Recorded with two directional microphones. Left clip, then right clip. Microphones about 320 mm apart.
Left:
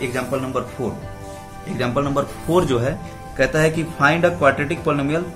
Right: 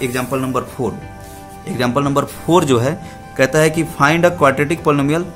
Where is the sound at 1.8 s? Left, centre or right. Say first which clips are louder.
Right 4 dB; right.